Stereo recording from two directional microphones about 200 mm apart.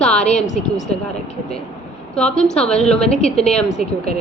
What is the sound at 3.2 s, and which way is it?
Speech, 30° left (ahead or behind).